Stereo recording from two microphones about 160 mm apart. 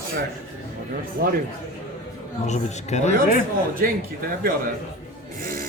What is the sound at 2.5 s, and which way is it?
Speech, 45° left (ahead or behind).